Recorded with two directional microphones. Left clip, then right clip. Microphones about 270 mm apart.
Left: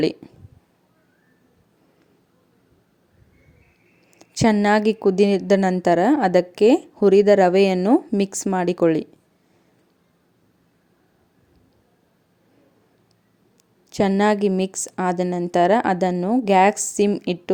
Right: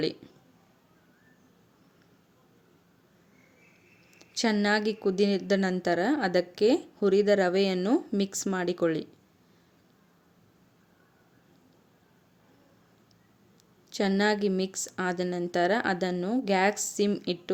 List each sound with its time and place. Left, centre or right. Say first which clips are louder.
0.0 s speech: left 9 dB; left
4.2 s speech: left 9 dB; left
13.9 s speech: left 8 dB; left